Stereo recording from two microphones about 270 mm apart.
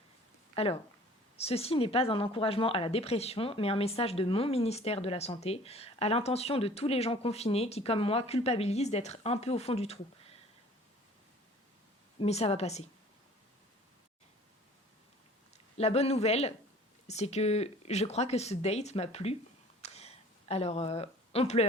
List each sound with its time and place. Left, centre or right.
0.5 s speech: left
12.2 s speech: left
15.8 s speech: left
19.8 s a sound: left